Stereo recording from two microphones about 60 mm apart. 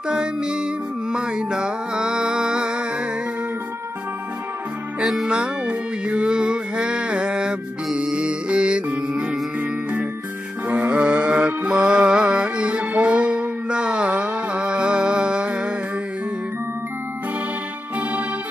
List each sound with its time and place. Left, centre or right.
0.1 s music: centre
1.1 s mantra: centre
5.0 s music: centre
10.7 s music: right